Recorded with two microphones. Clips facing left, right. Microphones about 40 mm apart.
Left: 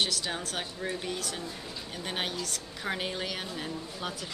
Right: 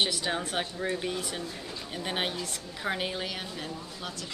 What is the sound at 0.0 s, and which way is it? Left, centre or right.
Speech, centre.